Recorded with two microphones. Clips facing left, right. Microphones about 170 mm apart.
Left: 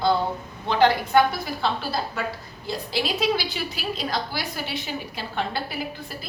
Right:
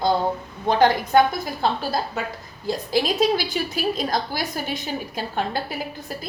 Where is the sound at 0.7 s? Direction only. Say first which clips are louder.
Right 2 dB; 45° right (ahead or behind).